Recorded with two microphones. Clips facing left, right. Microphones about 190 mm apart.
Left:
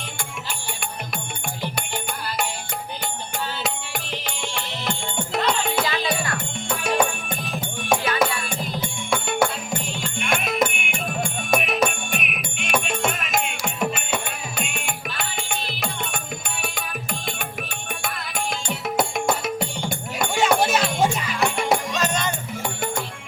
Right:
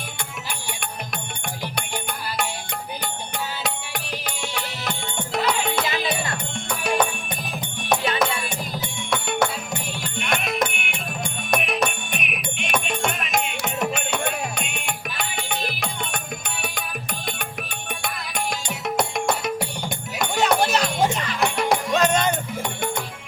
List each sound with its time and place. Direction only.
4.1 s music: 5° right (ahead or behind)
5.8 s music: 20° right (ahead or behind)
6.7 s music: centre (ahead or behind)
8.0 s music: 25° right (ahead or behind)
9.0 s music: centre (ahead or behind)
21.9 s music: 55° right (ahead or behind)